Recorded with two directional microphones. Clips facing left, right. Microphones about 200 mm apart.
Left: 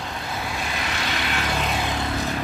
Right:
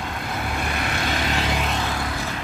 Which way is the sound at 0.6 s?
55° right (ahead or behind).